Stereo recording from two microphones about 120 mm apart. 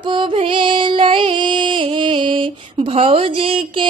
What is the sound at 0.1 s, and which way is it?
Music, 45° right (ahead or behind).